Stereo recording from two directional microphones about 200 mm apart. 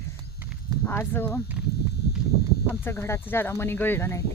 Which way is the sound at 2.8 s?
15° left (ahead or behind).